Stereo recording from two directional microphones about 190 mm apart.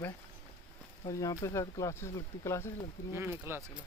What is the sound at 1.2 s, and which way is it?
Speech, 15° left (ahead or behind).